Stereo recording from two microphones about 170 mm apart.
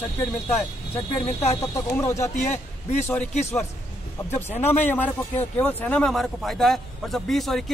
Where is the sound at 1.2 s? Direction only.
40° left (ahead or behind).